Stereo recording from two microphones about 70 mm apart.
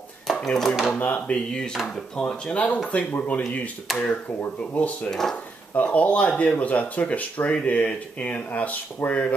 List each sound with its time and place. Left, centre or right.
0.3 s speech: centre
0.9 s speech: left
3.1 s speech: left
3.9 s speech: centre
4.7 s speech: left
5.1 s speech: centre
5.8 s speech: centre